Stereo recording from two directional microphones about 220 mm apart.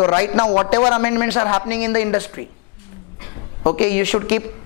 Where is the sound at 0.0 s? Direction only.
20° left (ahead or behind).